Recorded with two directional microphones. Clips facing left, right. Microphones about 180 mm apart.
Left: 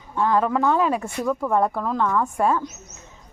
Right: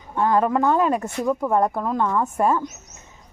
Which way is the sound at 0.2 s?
5° right (ahead or behind).